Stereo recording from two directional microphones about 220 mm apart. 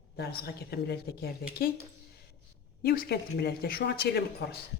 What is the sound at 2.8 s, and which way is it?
A man's voice, 45° left (ahead or behind).